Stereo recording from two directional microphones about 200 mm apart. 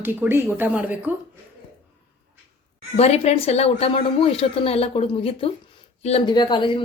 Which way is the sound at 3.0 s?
30° left (ahead or behind).